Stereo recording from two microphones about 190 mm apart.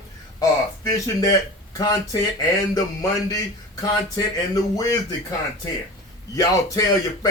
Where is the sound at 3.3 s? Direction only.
20° left (ahead or behind).